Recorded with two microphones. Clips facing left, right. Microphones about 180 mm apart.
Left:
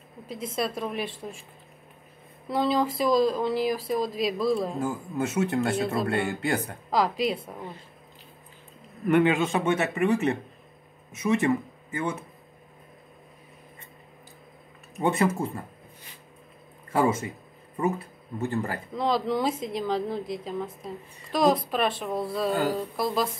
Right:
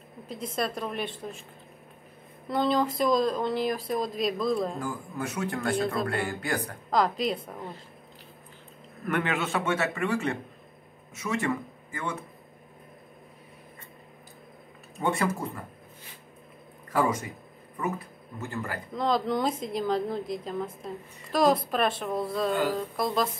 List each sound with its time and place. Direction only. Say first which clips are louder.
0.3 s speech: left 1 dB; 5° left (ahead or behind)
2.4 s speech: left 1 dB; 5° left (ahead or behind)
4.7 s speech: left 5 dB; 25° left (ahead or behind)
6.9 s speech: left 1 dB; 5° left (ahead or behind)
9.0 s speech: left 7 dB; 15° left (ahead or behind)
15.0 s speech: left 4 dB; 20° left (ahead or behind)
16.9 s speech: left 2 dB; 25° left (ahead or behind)
18.9 s speech: left 1 dB; centre (ahead or behind)
22.5 s speech: left 2 dB; 40° left (ahead or behind)
22.9 s speech: right 1 dB; centre (ahead or behind)